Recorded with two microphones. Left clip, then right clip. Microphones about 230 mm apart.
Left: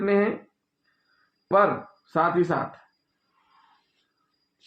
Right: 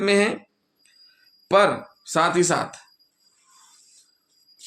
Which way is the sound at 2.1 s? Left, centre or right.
Right.